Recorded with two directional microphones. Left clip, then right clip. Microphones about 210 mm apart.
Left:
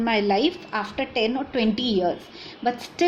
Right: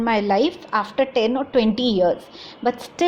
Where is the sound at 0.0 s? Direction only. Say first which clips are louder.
Right 2 dB; 20° right (ahead or behind).